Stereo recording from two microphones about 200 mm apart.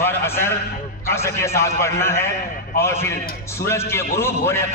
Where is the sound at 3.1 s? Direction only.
50° left (ahead or behind).